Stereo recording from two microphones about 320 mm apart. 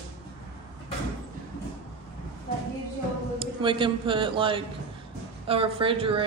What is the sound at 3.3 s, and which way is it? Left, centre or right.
A man's voice, centre.